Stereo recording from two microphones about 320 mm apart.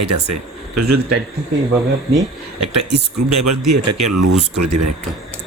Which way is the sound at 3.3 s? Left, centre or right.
Right.